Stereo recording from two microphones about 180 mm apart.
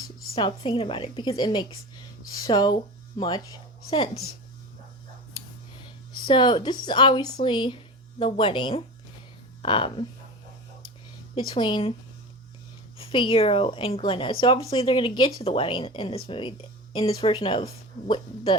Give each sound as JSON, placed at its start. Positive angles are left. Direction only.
{"t": 0.3, "sound": "a woman's voice", "side_deg": 25}
{"t": 6.2, "sound": "a woman's voice", "side_deg": 25}
{"t": 11.3, "sound": "a woman's voice", "side_deg": 25}
{"t": 13.0, "sound": "a woman's voice", "side_deg": 30}